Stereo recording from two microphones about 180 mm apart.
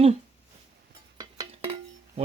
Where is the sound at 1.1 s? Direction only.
20° right (ahead or behind).